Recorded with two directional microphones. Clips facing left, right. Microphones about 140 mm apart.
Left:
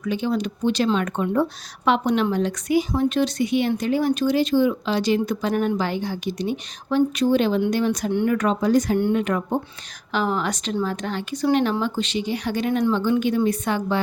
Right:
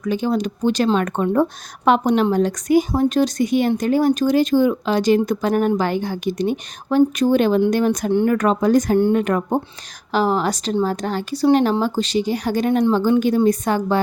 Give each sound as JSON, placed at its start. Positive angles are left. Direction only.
{"t": 0.0, "sound": "speech", "side_deg": -45}